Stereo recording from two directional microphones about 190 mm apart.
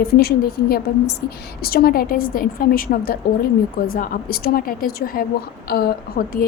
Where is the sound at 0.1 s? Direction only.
55° left (ahead or behind).